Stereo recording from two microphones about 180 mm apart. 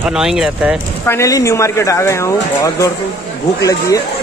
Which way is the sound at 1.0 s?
15° left (ahead or behind).